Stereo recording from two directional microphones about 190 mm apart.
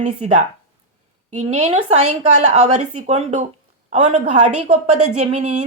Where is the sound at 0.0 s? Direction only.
40° right (ahead or behind).